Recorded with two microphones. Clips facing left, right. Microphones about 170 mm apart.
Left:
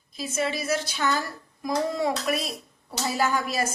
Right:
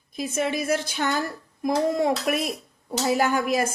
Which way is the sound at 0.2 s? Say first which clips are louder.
Right 3 dB; 55° right (ahead or behind).